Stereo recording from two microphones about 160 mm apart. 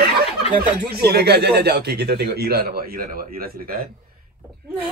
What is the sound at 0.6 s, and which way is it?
Speech, 80° right.